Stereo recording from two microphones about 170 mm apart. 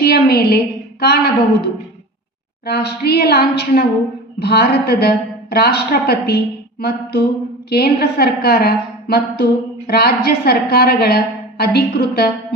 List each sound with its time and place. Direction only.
0.0 s a woman's voice: 70° left (ahead or behind)
2.6 s a woman's voice: 70° left (ahead or behind)